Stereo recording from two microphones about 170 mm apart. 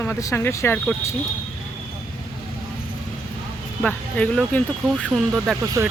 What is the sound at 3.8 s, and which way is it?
Speech, 5° left (ahead or behind).